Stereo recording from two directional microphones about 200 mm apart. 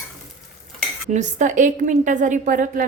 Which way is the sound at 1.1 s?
40° right (ahead or behind).